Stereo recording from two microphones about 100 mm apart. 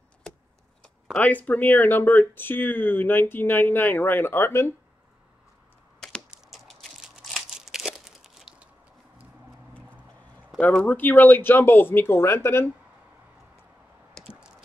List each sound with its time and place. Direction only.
1.1 s speech: 15° left (ahead or behind)
6.3 s crumpling: centre (ahead or behind)
10.6 s speech: 15° left (ahead or behind)